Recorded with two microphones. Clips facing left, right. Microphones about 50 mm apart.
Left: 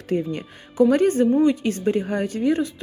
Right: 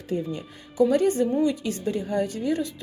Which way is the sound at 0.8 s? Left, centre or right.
Left.